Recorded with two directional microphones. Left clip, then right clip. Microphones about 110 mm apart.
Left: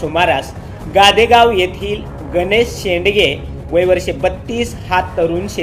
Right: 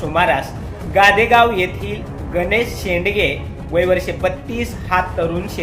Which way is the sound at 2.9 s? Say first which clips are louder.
Left 3 dB; 30° right (ahead or behind).